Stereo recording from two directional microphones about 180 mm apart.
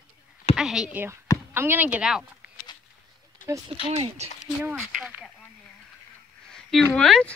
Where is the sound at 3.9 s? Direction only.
35° right (ahead or behind).